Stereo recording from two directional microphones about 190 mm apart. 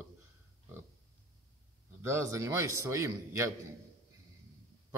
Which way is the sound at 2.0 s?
15° right (ahead or behind).